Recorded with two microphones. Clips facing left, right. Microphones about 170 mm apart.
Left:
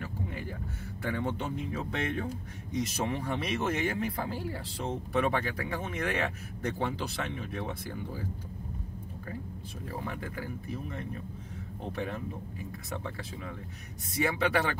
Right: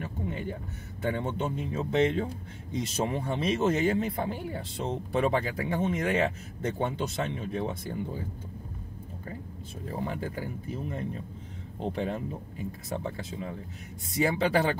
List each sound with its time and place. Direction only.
0.0 s a sound: 25° right (ahead or behind)
1.0 s speech: 25° right (ahead or behind)
9.8 s speech: 30° right (ahead or behind)